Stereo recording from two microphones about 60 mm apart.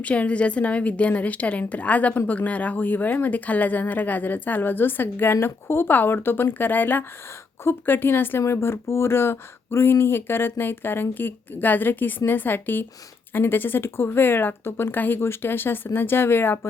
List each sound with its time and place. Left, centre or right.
0.0 s a woman's voice: left
8.4 s speech: left